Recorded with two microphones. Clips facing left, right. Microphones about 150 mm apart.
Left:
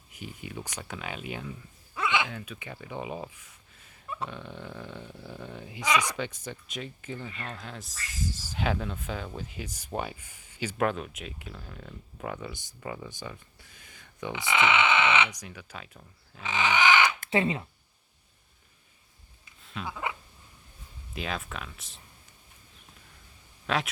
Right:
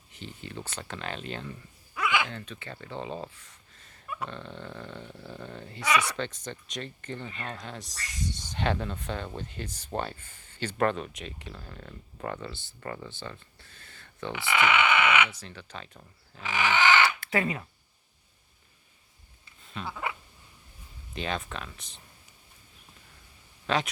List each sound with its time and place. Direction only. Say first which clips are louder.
0.1 s speech: left 1 dB; 10° left (ahead or behind)
2.0 s a sound: even; 25° left (ahead or behind)
2.2 s speech: even; 10° left (ahead or behind)
16.4 s crow: even; 20° left (ahead or behind)
17.2 s speech: left 2 dB; 25° left (ahead or behind)
19.6 s frog: even; centre (ahead or behind)
21.1 s speech: right 2 dB; 5° left (ahead or behind)
23.6 s speech: right 1 dB; centre (ahead or behind)